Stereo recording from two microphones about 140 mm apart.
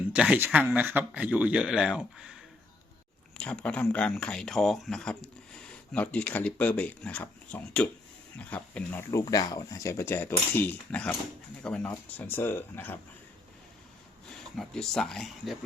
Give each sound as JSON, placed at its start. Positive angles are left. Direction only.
{"t": 0.1, "sound": "speech", "side_deg": -10}
{"t": 3.3, "sound": "speech", "side_deg": 10}
{"t": 9.0, "sound": "speech", "side_deg": 25}
{"t": 14.3, "sound": "speech", "side_deg": 5}